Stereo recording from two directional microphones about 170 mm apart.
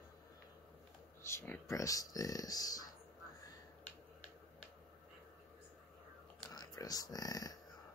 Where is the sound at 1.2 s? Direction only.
15° left (ahead or behind).